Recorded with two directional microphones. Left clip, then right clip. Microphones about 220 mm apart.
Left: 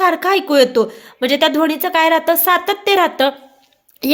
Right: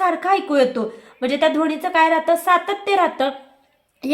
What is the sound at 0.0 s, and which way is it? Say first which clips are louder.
Speech: left 4 dB; 45° left (ahead or behind).